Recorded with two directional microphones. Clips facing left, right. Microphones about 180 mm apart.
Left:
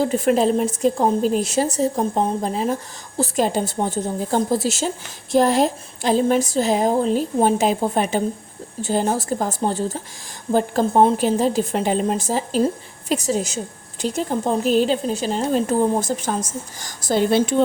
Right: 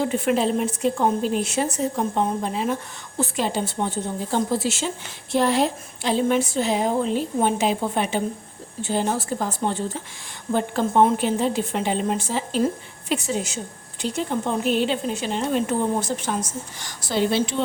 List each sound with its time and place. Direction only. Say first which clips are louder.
0.0 s a woman's voice: left 4 dB; 40° left (ahead or behind)